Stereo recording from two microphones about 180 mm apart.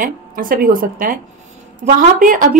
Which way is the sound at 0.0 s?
50° right (ahead or behind).